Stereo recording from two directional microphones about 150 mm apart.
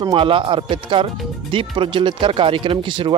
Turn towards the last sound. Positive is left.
turn(degrees=-35)  # may be behind; listen again after turning